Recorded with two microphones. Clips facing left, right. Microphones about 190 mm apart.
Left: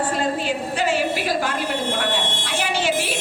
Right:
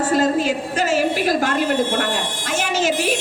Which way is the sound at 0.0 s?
40° right (ahead or behind).